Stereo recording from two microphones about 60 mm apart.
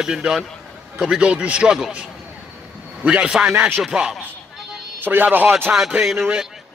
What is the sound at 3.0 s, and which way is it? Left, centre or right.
A man's voice, centre.